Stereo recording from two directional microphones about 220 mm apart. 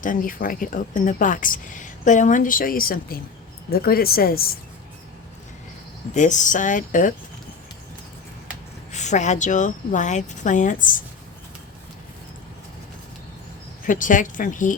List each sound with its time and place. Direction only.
0.0 s speech: 40° left (ahead or behind)
6.1 s speech: 35° left (ahead or behind)
8.9 s speech: 30° left (ahead or behind)
13.8 s speech: 35° left (ahead or behind)